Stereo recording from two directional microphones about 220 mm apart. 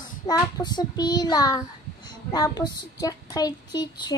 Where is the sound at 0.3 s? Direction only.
20° left (ahead or behind).